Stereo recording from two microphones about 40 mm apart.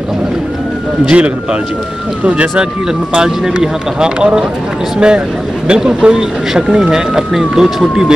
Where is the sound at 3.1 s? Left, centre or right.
Centre.